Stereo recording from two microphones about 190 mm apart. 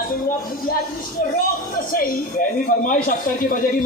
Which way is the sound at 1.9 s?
50° left (ahead or behind).